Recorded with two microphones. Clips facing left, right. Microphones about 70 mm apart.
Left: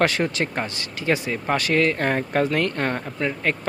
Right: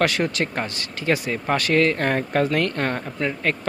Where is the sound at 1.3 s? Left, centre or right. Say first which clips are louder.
Right 1 dB; centre.